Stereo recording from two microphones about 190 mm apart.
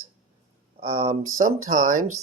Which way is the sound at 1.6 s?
45° right (ahead or behind).